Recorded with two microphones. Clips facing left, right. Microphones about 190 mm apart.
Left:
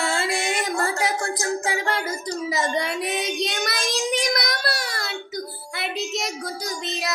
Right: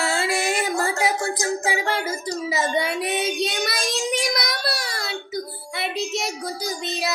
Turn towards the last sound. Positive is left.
turn(degrees=0)  # may be behind; listen again after turning